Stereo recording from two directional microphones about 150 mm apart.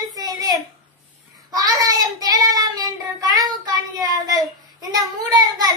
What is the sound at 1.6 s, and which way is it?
Child singing, 25° right (ahead or behind).